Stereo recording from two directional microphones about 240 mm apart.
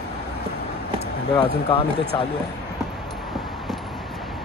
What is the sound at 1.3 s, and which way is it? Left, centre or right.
Speech, left.